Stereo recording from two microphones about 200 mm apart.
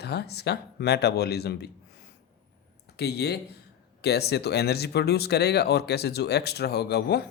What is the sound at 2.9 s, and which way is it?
Speech, 55° left (ahead or behind).